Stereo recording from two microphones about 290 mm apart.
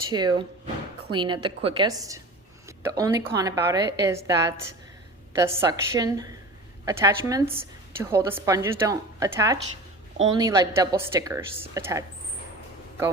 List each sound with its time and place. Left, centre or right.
0.1 s a woman's voice: centre